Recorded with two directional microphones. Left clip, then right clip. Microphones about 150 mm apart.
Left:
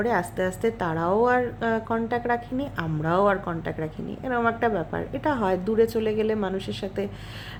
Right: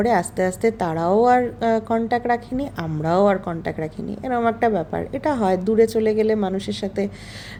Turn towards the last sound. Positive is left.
turn(degrees=-20)  # may be behind; listen again after turning